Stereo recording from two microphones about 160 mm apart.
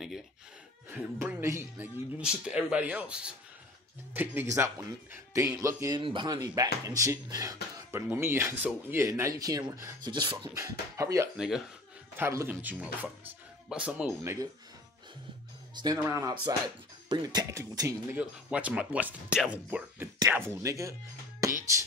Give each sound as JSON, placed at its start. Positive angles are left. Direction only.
{"t": 0.8, "sound": "speech", "side_deg": -10}
{"t": 5.9, "sound": "speech", "side_deg": -30}
{"t": 10.5, "sound": "speech", "side_deg": -20}
{"t": 11.3, "sound": "speech", "side_deg": -5}
{"t": 12.2, "sound": "speech", "side_deg": -15}
{"t": 14.2, "sound": "speech", "side_deg": -15}
{"t": 15.7, "sound": "speech", "side_deg": -25}
{"t": 18.5, "sound": "speech", "side_deg": -10}
{"t": 21.4, "sound": "music", "side_deg": -20}